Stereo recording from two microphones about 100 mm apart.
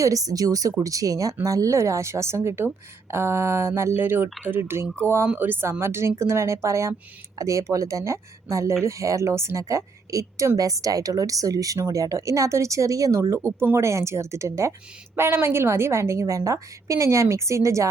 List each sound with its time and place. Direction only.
0.0 s a woman's voice: 35° right (ahead or behind)